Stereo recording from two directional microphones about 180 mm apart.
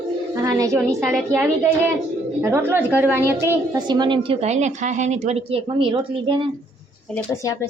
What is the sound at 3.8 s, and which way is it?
A woman's voice, 25° right (ahead or behind).